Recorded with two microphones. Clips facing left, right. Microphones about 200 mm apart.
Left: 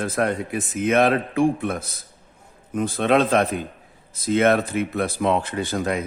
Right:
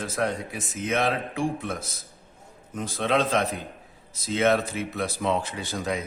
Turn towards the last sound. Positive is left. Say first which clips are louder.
# left 6 dB
turn(degrees=55)  # may be behind; listen again after turning